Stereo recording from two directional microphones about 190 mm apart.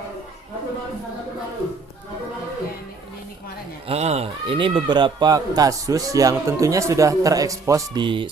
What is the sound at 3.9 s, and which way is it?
Speech, 35° right (ahead or behind).